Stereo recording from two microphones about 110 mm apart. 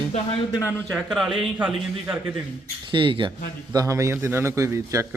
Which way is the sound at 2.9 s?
50° right (ahead or behind).